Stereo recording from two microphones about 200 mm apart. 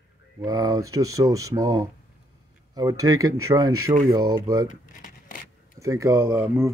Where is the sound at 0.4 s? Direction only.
15° right (ahead or behind).